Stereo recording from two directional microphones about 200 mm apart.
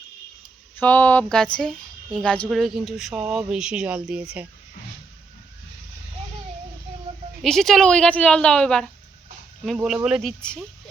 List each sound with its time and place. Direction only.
0.8 s speech: 10° left (ahead or behind)
7.4 s speech: centre (ahead or behind)